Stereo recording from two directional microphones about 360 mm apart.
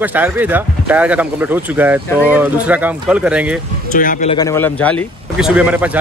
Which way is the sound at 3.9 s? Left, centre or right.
Left.